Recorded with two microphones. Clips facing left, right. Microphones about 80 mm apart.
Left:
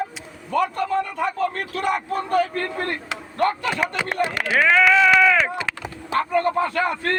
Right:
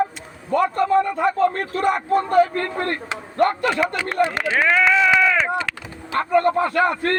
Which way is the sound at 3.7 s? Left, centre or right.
Left.